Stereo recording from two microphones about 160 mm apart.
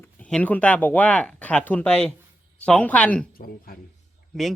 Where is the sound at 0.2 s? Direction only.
5° left (ahead or behind).